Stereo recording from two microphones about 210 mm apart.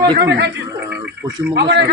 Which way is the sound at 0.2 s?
55° right (ahead or behind).